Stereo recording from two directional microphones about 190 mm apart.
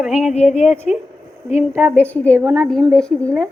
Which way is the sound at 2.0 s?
10° left (ahead or behind).